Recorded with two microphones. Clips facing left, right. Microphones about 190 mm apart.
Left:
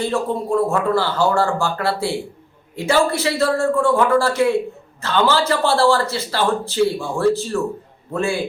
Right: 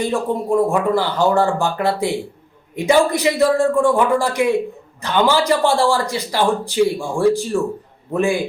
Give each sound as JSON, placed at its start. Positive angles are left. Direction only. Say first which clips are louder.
{"t": 0.0, "sound": "a man's voice", "louder": "right 1 dB", "side_deg": -15}